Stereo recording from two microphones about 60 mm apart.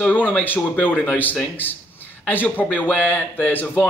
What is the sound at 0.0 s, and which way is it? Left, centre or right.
A man's voice, left.